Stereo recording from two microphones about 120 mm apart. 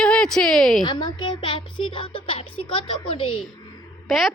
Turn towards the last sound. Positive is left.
turn(degrees=0)  # may be behind; listen again after turning